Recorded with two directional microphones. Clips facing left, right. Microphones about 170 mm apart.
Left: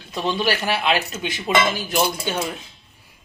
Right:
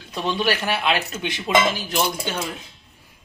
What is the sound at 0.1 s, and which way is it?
A man's voice, centre (ahead or behind).